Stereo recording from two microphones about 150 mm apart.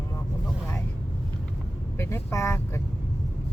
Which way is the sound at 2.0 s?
20° left (ahead or behind).